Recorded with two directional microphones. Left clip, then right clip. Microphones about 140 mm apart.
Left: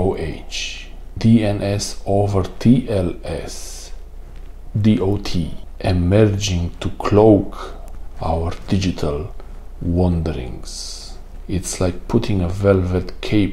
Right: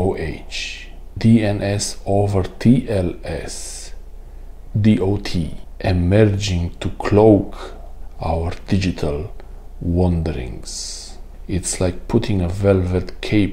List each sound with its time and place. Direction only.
0.0 s speech: 25° right (ahead or behind)